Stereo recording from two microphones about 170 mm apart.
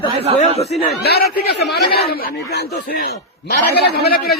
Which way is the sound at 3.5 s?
70° left (ahead or behind).